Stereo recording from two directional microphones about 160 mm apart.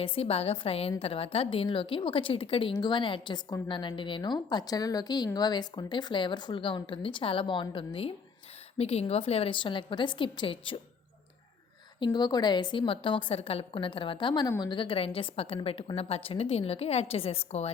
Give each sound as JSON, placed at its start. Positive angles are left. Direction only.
{"t": 0.0, "sound": "a woman's voice", "side_deg": 35}
{"t": 11.9, "sound": "a woman's voice", "side_deg": 30}